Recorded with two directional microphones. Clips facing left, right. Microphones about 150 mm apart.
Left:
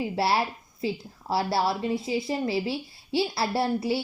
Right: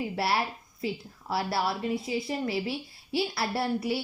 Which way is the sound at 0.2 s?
30° left (ahead or behind).